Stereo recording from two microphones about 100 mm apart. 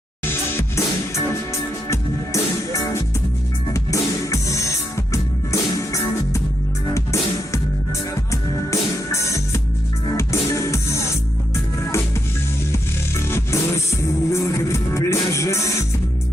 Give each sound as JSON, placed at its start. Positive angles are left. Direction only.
{"t": 0.3, "sound": "music", "side_deg": 25}
{"t": 3.7, "sound": "music", "side_deg": 30}